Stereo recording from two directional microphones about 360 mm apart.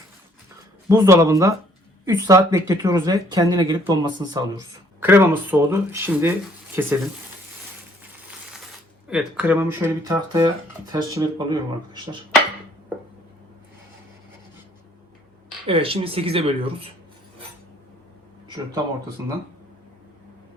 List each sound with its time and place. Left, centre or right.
0.9 s speech: centre
9.0 s speech: centre
15.6 s speech: centre